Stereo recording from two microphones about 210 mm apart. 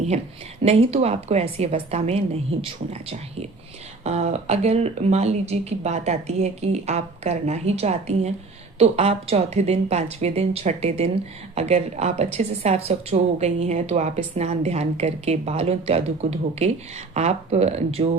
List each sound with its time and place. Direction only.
0.6 s a woman's voice: 30° right (ahead or behind)